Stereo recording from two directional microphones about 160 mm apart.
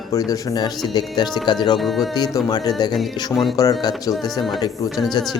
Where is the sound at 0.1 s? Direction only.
20° left (ahead or behind).